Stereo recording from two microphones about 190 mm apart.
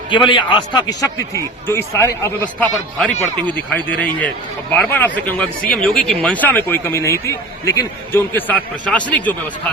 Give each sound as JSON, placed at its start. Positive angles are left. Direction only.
{"t": 0.3, "sound": "speech", "side_deg": 25}